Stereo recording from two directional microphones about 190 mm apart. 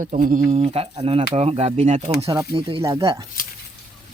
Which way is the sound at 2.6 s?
25° right (ahead or behind).